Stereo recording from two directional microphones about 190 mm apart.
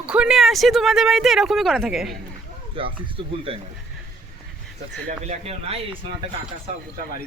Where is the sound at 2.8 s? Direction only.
30° right (ahead or behind).